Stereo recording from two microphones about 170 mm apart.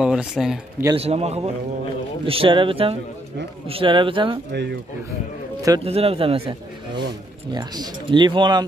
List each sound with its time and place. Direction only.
0.0 s speech: 5° right (ahead or behind)
0.9 s speech: 35° right (ahead or behind)
4.5 s speech: 80° right
5.9 s speech: 35° right (ahead or behind)
7.5 s speech: 25° right (ahead or behind)